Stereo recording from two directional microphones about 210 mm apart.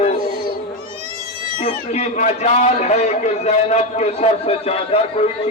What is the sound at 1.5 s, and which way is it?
A man's voice, 30° left (ahead or behind).